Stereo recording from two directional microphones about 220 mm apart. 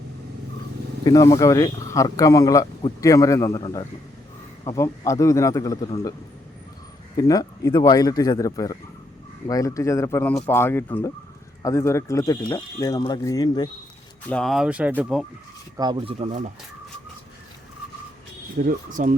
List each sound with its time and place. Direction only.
1.0 s speech: 15° left (ahead or behind)
7.2 s speech: 15° left (ahead or behind)
14.3 s speech: 5° left (ahead or behind)
15.8 s speech: 20° right (ahead or behind)
18.6 s speech: 40° right (ahead or behind)